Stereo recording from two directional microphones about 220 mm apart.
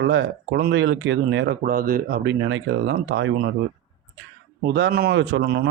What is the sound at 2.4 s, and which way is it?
Speech, 55° right (ahead or behind).